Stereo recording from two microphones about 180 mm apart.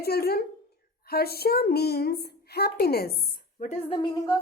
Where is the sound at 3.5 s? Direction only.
40° left (ahead or behind).